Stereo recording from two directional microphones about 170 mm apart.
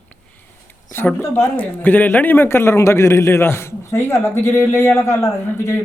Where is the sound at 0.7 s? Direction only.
15° left (ahead or behind).